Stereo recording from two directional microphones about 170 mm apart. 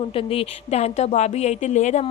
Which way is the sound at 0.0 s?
35° left (ahead or behind).